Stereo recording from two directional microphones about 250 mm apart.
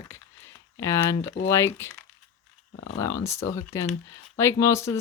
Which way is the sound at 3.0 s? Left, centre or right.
Centre.